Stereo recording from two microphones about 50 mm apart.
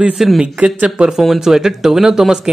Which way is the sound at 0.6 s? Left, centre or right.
Right.